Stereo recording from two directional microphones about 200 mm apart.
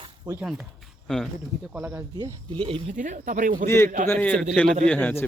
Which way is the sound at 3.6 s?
10° left (ahead or behind).